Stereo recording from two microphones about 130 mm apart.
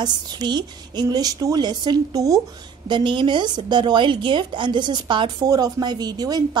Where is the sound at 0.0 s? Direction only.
35° right (ahead or behind).